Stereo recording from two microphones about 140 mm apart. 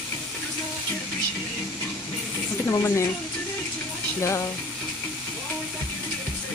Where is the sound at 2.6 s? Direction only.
20° left (ahead or behind).